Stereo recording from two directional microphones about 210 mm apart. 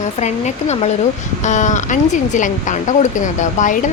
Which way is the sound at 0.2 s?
35° left (ahead or behind).